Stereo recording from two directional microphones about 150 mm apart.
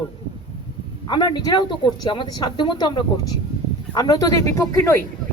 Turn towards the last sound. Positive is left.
turn(degrees=20)  # may be behind; listen again after turning